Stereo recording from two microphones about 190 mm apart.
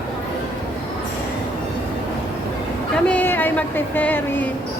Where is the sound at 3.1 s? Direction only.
10° left (ahead or behind).